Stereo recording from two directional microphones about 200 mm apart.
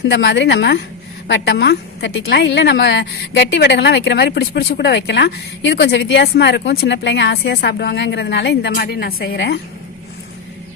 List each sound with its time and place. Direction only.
0.1 s a woman's voice: 65° left (ahead or behind)